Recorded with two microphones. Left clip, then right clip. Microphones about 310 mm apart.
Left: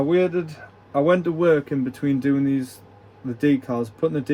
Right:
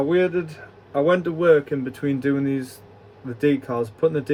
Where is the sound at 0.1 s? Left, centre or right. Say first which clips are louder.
Even; centre.